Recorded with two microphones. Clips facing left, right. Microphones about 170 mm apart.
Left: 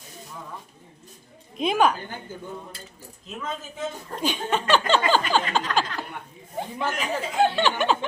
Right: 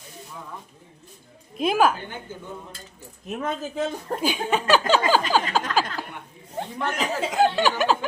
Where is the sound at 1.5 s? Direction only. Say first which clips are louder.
Right 1 dB; 5° right (ahead or behind).